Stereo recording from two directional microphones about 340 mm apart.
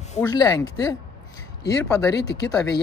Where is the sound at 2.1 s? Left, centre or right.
Left.